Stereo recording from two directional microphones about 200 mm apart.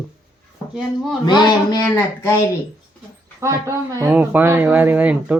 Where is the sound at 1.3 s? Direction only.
20° left (ahead or behind).